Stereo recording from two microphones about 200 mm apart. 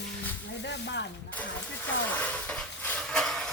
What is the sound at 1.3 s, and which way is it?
Vehicle, 10° left (ahead or behind).